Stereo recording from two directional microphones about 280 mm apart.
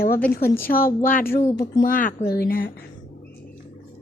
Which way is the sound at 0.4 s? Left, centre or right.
Centre.